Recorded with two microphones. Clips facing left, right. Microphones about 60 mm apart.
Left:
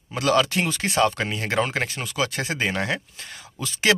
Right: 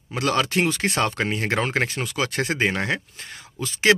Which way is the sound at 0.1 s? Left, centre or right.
Right.